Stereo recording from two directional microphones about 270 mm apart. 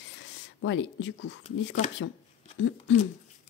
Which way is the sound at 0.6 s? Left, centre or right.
Left.